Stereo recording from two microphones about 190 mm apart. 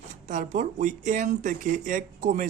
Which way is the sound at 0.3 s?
40° right (ahead or behind).